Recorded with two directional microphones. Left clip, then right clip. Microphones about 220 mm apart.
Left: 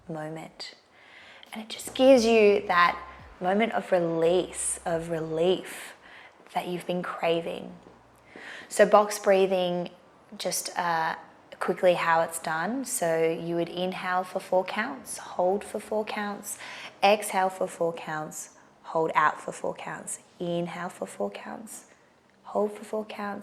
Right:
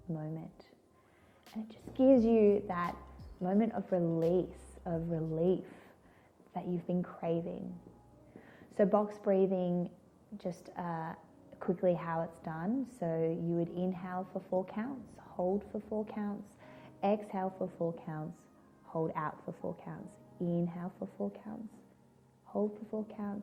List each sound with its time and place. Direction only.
0.1 s a woman's voice: 15° left (ahead or behind)
22.4 s speech: 25° left (ahead or behind)
22.7 s a woman's voice: 10° left (ahead or behind)